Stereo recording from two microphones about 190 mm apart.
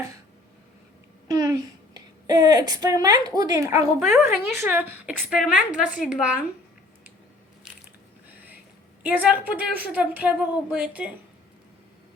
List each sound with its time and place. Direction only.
1.3 s a woman's voice: 15° right (ahead or behind)
9.0 s a woman's voice: 10° right (ahead or behind)